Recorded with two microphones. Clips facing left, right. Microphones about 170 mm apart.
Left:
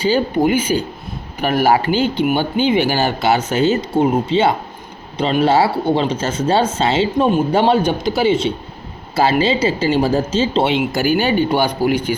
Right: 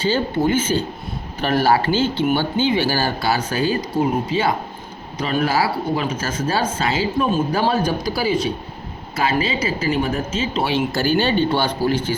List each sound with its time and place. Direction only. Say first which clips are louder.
0.0 s speech: left 4 dB; 15° left (ahead or behind)